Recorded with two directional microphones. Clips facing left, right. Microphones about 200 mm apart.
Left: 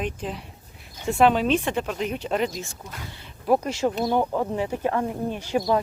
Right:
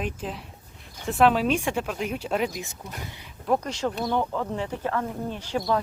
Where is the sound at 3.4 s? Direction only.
10° left (ahead or behind).